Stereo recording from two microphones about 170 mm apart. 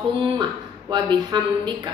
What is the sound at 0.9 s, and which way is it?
A woman's voice, 25° right (ahead or behind).